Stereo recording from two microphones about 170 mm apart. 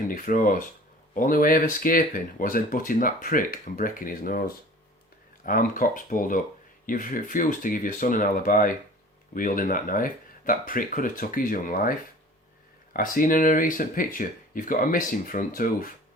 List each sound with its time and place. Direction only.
0.1 s speech: 55° left (ahead or behind)